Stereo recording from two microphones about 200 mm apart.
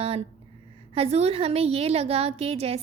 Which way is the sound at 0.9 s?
30° right (ahead or behind).